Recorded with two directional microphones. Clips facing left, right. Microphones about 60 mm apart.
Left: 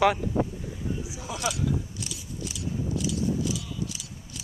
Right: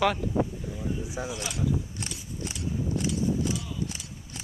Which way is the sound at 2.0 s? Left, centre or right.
Right.